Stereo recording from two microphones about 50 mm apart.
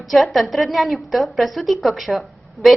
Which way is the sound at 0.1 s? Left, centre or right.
Centre.